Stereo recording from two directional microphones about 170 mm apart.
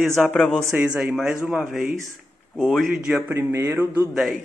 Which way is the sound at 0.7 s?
10° right (ahead or behind).